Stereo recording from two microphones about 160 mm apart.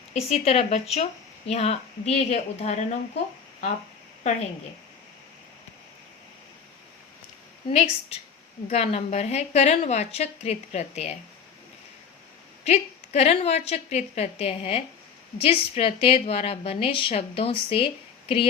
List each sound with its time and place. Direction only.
0.1 s a woman's voice: 40° left (ahead or behind)
4.2 s a woman's voice: 45° left (ahead or behind)
7.7 s a woman's voice: 40° left (ahead or behind)
12.6 s a woman's voice: 40° left (ahead or behind)